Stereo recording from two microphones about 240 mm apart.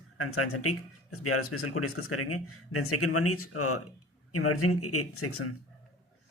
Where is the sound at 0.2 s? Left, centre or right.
Left.